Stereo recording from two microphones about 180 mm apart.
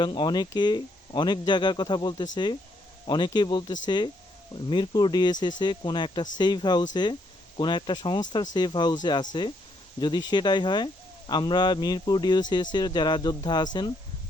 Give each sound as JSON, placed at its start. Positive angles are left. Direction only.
{"t": 0.0, "sound": "speech", "side_deg": 25}